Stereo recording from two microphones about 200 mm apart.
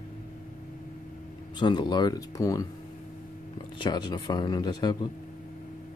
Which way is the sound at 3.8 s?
20° left (ahead or behind).